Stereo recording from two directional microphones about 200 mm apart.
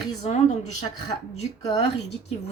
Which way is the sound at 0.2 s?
35° left (ahead or behind).